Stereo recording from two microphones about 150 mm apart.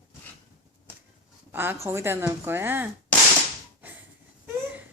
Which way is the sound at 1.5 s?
15° right (ahead or behind).